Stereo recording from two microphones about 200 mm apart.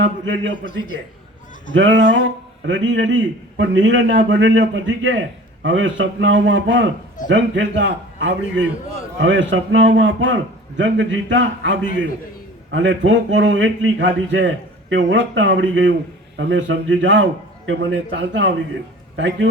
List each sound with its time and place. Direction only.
0.0 s a man's voice: 65° right (ahead or behind)
1.7 s a man's voice: 65° right (ahead or behind)